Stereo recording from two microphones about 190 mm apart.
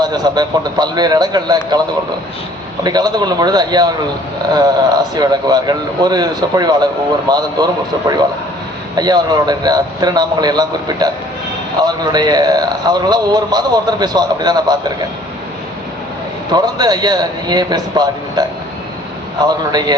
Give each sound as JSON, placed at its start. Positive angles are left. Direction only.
{"t": 0.0, "sound": "a man's voice", "side_deg": -20}
{"t": 2.8, "sound": "a man's voice", "side_deg": -20}
{"t": 16.5, "sound": "a man's voice", "side_deg": -20}